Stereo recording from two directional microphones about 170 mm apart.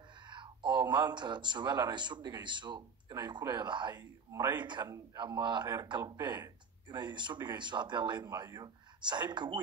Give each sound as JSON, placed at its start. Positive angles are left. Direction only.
{"t": 0.3, "sound": "speech", "side_deg": -30}